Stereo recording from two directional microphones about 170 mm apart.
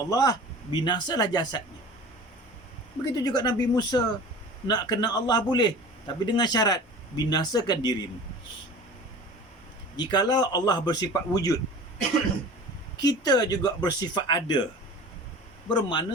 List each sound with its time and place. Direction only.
0.0 s a man's voice: 20° left (ahead or behind)
3.2 s a man's voice: 25° left (ahead or behind)
10.0 s a man's voice: 25° left (ahead or behind)
13.0 s a man's voice: 25° left (ahead or behind)
15.7 s a man's voice: 30° left (ahead or behind)